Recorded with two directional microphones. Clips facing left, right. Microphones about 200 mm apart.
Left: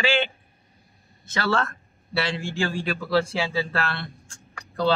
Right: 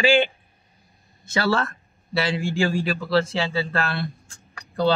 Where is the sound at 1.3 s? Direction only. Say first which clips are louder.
Right 2 dB; 5° right (ahead or behind).